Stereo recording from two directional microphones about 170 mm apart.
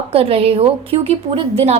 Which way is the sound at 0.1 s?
35° right (ahead or behind).